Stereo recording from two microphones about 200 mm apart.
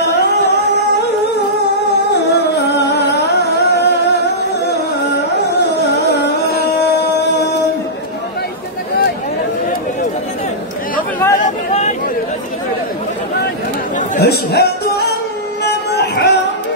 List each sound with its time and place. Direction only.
2.1 s music: 55° left (ahead or behind)
11.3 s a sound: 35° left (ahead or behind)
14.2 s music: 55° left (ahead or behind)